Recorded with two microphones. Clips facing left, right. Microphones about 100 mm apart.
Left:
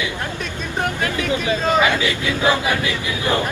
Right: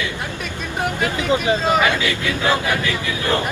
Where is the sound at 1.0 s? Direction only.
25° right (ahead or behind).